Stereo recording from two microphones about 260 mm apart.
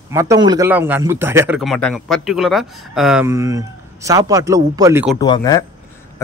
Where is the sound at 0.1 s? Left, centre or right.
Centre.